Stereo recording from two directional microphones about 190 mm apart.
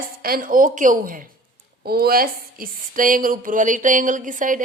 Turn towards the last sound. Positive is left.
turn(degrees=-45)  # may be behind; listen again after turning